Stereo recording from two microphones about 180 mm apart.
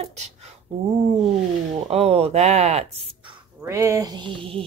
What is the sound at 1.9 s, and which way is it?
Speech, 35° right (ahead or behind).